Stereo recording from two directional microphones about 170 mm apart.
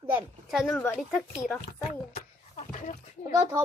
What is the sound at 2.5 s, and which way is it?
Speech, 50° left (ahead or behind).